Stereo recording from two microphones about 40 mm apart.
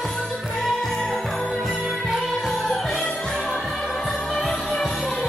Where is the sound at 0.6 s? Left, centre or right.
Centre.